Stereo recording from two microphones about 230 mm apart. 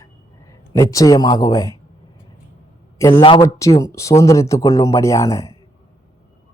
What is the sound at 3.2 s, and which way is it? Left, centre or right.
Speech, left.